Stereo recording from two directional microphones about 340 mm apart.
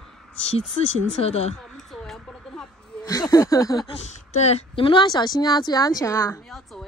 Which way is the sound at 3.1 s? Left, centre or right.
Centre.